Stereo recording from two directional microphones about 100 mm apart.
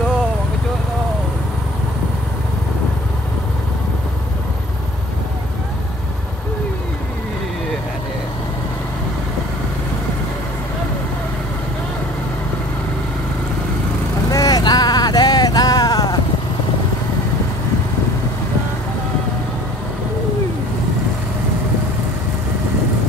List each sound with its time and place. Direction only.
14.3 s vehicle: 40° left (ahead or behind)